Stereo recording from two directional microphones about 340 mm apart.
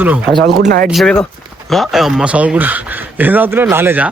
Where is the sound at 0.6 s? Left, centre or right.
Right.